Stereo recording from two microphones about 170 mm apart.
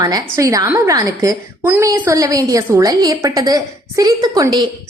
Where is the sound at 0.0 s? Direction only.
20° right (ahead or behind).